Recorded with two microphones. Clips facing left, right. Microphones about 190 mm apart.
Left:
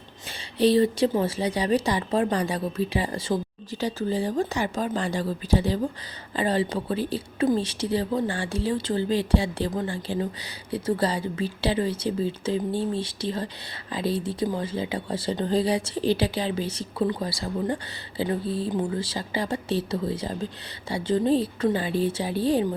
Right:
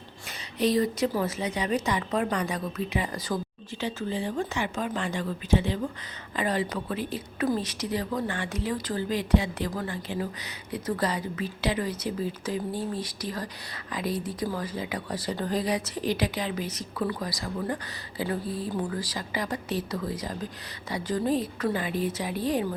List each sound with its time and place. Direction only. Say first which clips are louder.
0.3 s a woman's voice: left 5 dB; 30° left (ahead or behind)